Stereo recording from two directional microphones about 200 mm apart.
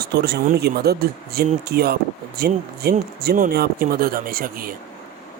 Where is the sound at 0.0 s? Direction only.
55° right (ahead or behind).